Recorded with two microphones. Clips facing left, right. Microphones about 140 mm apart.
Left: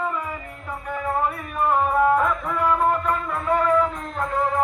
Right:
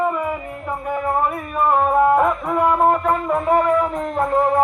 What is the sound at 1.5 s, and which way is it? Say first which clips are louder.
Music: right 4 dB; 50° right (ahead or behind).